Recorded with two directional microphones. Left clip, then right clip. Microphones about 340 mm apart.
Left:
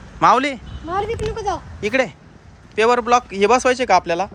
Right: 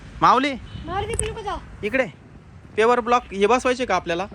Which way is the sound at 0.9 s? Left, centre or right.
Left.